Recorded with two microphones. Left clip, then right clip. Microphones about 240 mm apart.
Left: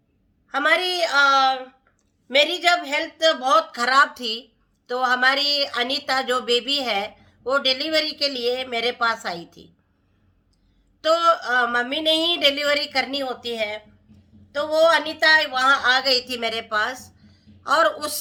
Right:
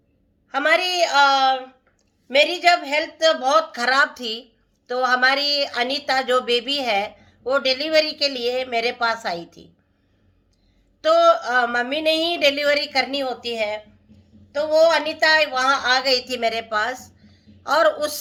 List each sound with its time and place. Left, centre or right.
0.9 s speech: centre
11.0 s speech: centre